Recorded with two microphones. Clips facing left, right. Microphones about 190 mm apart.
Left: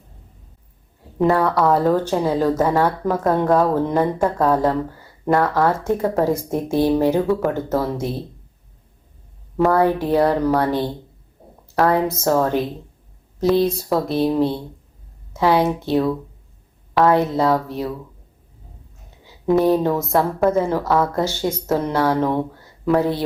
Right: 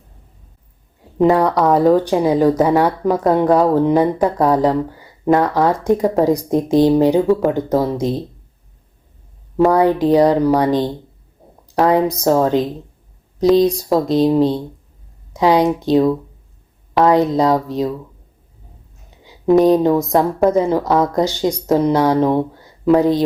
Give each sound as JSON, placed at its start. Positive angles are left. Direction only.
{"t": 1.2, "sound": "speech", "side_deg": -15}
{"t": 9.6, "sound": "speech", "side_deg": -15}
{"t": 19.2, "sound": "speech", "side_deg": -15}